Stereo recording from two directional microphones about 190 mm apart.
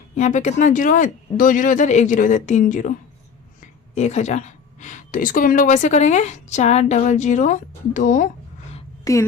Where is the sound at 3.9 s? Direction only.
35° left (ahead or behind).